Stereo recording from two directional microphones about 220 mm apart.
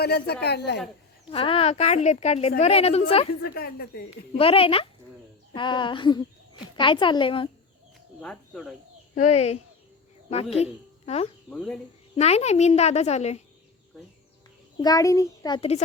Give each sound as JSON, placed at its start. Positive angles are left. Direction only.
{"t": 0.0, "sound": "a woman's voice", "side_deg": 45}
{"t": 1.3, "sound": "a woman's voice", "side_deg": 25}
{"t": 3.4, "sound": "a woman's voice", "side_deg": 45}
{"t": 4.4, "sound": "a woman's voice", "side_deg": 25}
{"t": 8.2, "sound": "speech", "side_deg": 0}
{"t": 9.3, "sound": "a woman's voice", "side_deg": 30}
{"t": 11.5, "sound": "speech", "side_deg": 0}
{"t": 12.1, "sound": "a woman's voice", "side_deg": 30}
{"t": 14.8, "sound": "a child's voice", "side_deg": 15}